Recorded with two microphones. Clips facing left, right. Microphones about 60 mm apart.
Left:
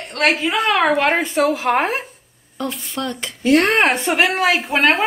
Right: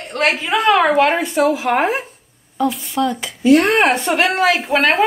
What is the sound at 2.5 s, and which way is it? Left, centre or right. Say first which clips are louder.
Speech: right 7 dB; centre.